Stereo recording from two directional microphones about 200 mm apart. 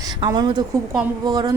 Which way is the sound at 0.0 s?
20° right (ahead or behind).